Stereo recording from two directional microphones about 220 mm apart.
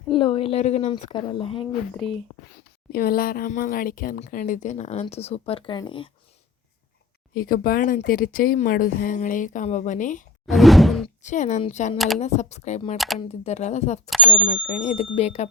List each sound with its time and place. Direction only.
0.2 s a woman's voice: 25° left (ahead or behind)
2.9 s speech: 40° left (ahead or behind); by 6.1 s 20° left (ahead or behind)
7.3 s speech: 40° left (ahead or behind)
10.4 s whoosh: centre (ahead or behind)
11.2 s speech: 35° left (ahead or behind)
11.9 s speech: centre (ahead or behind)
12.2 s a woman's voice: 30° left (ahead or behind)